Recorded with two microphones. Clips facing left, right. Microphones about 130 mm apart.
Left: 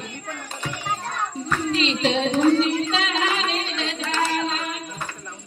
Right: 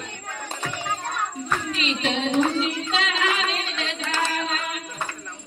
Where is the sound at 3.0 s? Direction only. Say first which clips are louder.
Left 1 dB; 30° left (ahead or behind).